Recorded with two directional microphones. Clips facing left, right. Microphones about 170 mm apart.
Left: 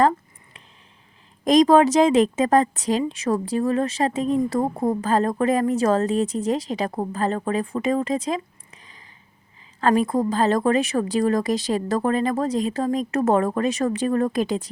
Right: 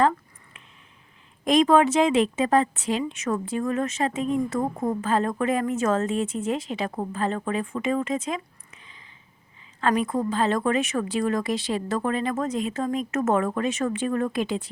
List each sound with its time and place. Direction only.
1.5 s a woman's voice: 35° left (ahead or behind)